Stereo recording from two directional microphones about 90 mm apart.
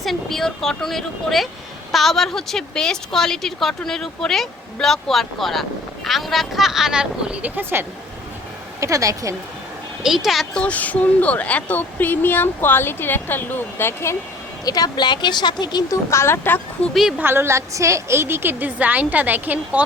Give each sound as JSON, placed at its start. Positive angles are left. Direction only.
{"t": 0.0, "sound": "a woman's voice", "side_deg": 5}
{"t": 8.8, "sound": "a woman's voice", "side_deg": -35}
{"t": 10.0, "sound": "a woman's voice", "side_deg": -5}
{"t": 10.5, "sound": "speech", "side_deg": 15}
{"t": 14.6, "sound": "a woman's voice", "side_deg": 45}
{"t": 15.9, "sound": "speech", "side_deg": 30}
{"t": 16.9, "sound": "a woman's voice", "side_deg": -5}
{"t": 17.2, "sound": "a woman's voice", "side_deg": -25}